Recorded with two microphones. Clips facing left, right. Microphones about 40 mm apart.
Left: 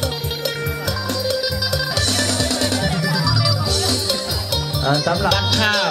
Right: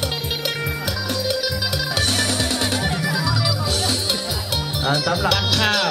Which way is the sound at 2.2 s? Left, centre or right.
Right.